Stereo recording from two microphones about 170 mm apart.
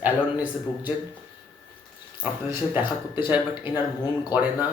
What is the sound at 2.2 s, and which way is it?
Speech, 10° right (ahead or behind).